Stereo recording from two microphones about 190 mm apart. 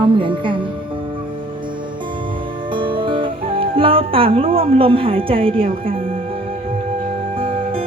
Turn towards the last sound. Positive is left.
turn(degrees=-30)  # may be behind; listen again after turning